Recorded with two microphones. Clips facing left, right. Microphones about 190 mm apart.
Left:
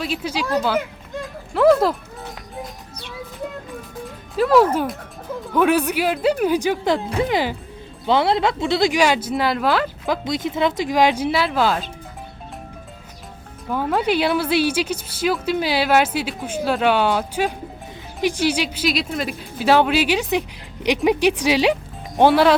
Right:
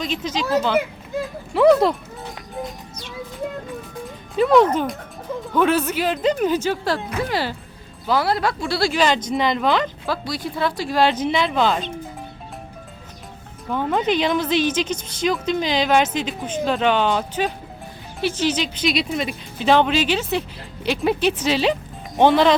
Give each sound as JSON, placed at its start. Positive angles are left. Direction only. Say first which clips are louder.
{"t": 0.0, "sound": "a woman's voice", "louder": "even", "side_deg": 10}
{"t": 0.8, "sound": "a child's voice", "louder": "right 3 dB", "side_deg": -5}
{"t": 4.4, "sound": "a woman's voice", "louder": "even", "side_deg": 0}
{"t": 10.1, "sound": "a woman's voice", "louder": "left 3 dB", "side_deg": 20}
{"t": 13.7, "sound": "a woman's voice", "louder": "even", "side_deg": 5}